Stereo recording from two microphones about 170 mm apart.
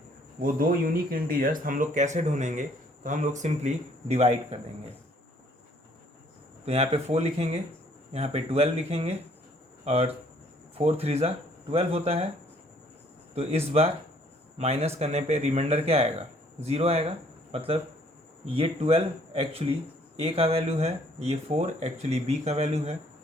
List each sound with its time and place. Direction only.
0.4 s speech: 55° right (ahead or behind); by 4.4 s 40° right (ahead or behind)
6.7 s speech: 35° right (ahead or behind)
13.3 s speech: 35° right (ahead or behind)